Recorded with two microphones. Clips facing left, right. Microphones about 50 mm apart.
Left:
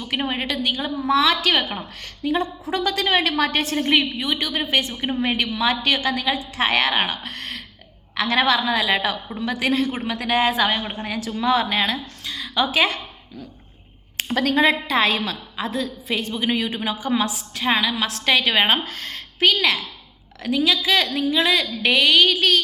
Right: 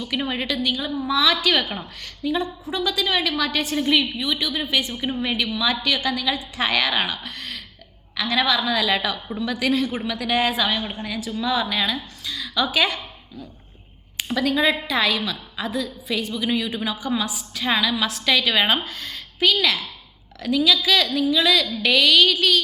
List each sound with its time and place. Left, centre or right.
0.0 s a woman's voice: left
2.6 s a woman's voice: left
7.2 s a sound: left
8.1 s a woman's voice: left
11.3 s a woman's voice: left
14.3 s a woman's voice: left
17.5 s a woman's voice: left
17.9 s a woman's voice: left
18.9 s a sound: left
20.4 s a woman's voice: left